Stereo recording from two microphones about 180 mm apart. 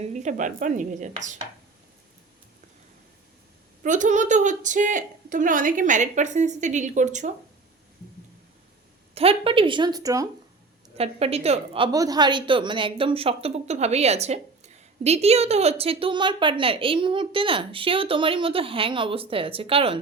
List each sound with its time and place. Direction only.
0.0 s a woman's voice: 40° right (ahead or behind)
3.8 s a woman's voice: 45° right (ahead or behind)
9.1 s speech: 30° right (ahead or behind)
10.9 s a woman's voice: 35° right (ahead or behind)